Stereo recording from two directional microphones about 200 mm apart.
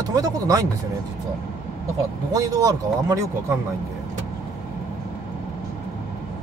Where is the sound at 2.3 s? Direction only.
20° right (ahead or behind).